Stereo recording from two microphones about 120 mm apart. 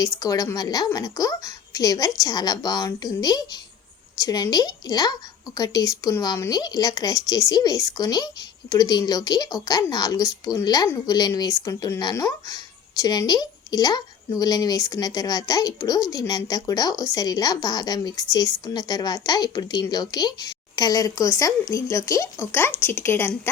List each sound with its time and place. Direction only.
0.2 s speech: 30° left (ahead or behind)